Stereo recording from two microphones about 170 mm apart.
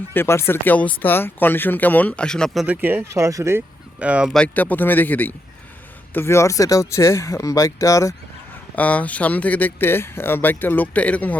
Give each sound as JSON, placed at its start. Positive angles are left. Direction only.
{"t": 0.1, "sound": "speech", "side_deg": 15}
{"t": 2.6, "sound": "speech", "side_deg": -10}
{"t": 4.0, "sound": "speech", "side_deg": -5}
{"t": 4.4, "sound": "speech", "side_deg": 10}